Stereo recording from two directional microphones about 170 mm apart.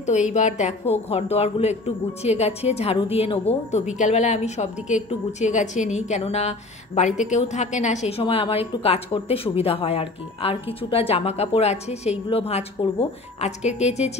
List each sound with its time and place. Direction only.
0.3 s a woman's voice: 45° left (ahead or behind)